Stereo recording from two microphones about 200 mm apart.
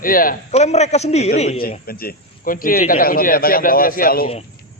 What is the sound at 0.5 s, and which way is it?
A man's voice, 35° left (ahead or behind).